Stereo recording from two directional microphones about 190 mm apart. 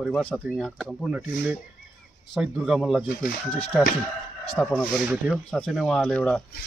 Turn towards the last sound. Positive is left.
turn(degrees=5)  # may be behind; listen again after turning